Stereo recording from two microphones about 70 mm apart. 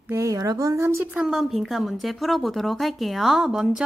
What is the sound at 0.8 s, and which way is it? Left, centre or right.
Speech, right.